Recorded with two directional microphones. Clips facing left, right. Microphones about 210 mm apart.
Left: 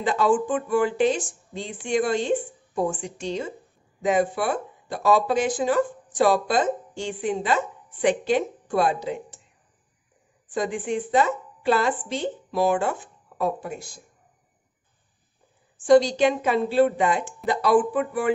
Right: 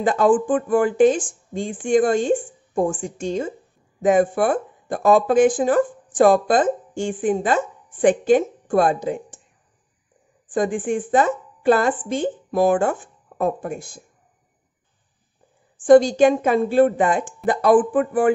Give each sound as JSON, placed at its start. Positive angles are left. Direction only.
{"t": 0.0, "sound": "speech", "side_deg": -50}
{"t": 10.5, "sound": "speech", "side_deg": -50}
{"t": 15.8, "sound": "speech", "side_deg": -50}